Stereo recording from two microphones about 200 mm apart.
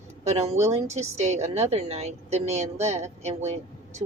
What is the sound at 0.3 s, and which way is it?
A woman's voice, 30° right (ahead or behind).